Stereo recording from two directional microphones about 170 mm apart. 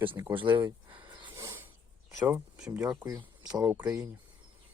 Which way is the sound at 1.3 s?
10° right (ahead or behind).